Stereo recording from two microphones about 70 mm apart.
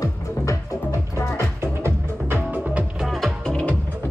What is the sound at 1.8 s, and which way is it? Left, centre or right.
Music, right.